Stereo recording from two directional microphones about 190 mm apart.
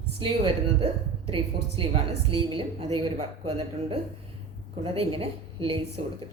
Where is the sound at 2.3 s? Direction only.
30° right (ahead or behind).